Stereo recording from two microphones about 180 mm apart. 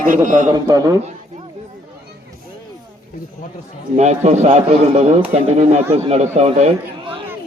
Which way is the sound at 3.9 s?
40° right (ahead or behind).